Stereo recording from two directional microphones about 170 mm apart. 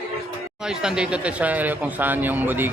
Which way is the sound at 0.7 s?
5° right (ahead or behind).